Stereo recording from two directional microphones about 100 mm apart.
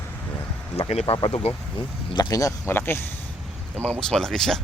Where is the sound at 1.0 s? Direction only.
60° left (ahead or behind).